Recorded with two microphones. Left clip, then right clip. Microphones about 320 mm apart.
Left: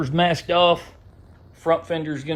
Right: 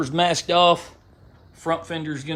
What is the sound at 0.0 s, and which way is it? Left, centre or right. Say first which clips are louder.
Speech: even; centre.